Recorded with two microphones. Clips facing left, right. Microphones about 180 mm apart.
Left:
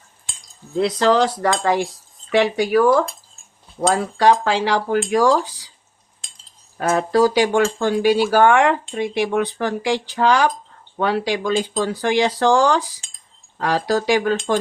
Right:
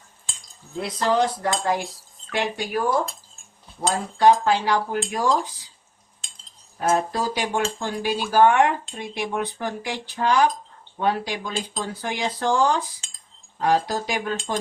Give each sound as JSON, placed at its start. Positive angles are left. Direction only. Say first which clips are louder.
{"t": 0.8, "sound": "cutlery", "louder": "left 6 dB", "side_deg": 75}
{"t": 3.8, "sound": "speech", "louder": "left 5 dB", "side_deg": 90}
{"t": 6.7, "sound": "speech", "louder": "left 6 dB", "side_deg": 85}
{"t": 13.6, "sound": "cutlery", "louder": "left 2 dB", "side_deg": 85}